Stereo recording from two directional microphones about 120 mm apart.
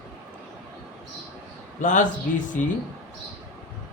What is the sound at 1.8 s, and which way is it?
Speech, 90° left.